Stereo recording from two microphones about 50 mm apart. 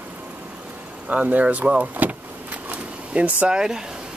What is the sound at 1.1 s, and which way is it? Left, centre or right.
Speech, right.